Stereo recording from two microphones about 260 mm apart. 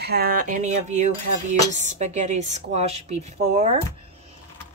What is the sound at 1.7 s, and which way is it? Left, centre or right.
A woman's voice, right.